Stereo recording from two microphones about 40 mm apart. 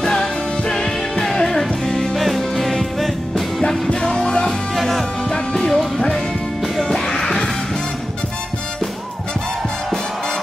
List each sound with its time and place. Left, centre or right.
0.0 s music: centre
4.0 s music: centre
4.7 s music: centre